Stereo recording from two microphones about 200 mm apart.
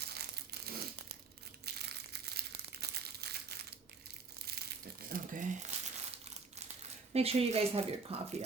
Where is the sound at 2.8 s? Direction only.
55° right (ahead or behind).